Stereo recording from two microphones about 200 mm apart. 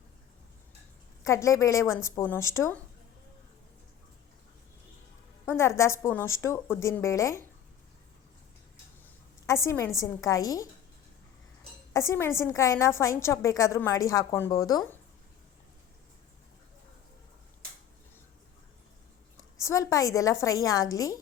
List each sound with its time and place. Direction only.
1.2 s a woman's voice: 15° left (ahead or behind)
5.5 s a woman's voice: 15° left (ahead or behind)
9.5 s a woman's voice: 15° left (ahead or behind)
11.9 s a woman's voice: 15° left (ahead or behind)
19.5 s a woman's voice: 15° left (ahead or behind)